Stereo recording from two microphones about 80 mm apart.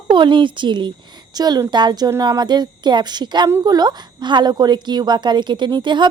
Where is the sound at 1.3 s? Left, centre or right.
Right.